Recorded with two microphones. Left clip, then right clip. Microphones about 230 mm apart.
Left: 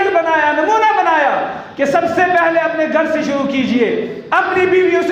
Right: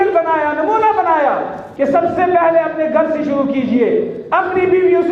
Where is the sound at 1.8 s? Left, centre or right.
Left.